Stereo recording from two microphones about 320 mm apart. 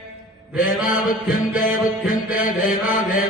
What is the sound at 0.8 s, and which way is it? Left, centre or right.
Mantra, left.